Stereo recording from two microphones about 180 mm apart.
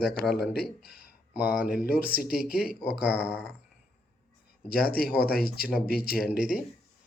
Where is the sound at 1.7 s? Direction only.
55° left (ahead or behind).